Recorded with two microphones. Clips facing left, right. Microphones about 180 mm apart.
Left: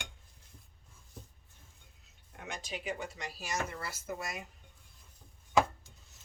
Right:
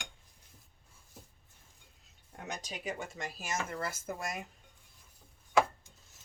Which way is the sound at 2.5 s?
40° right (ahead or behind).